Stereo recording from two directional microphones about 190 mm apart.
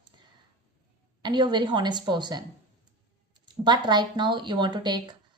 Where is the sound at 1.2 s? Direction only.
25° right (ahead or behind).